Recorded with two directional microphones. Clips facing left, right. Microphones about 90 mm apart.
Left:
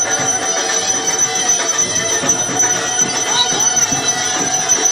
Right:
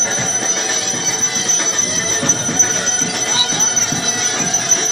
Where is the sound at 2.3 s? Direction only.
35° left (ahead or behind).